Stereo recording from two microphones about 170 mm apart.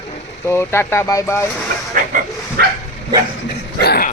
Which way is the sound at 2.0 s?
50° right (ahead or behind).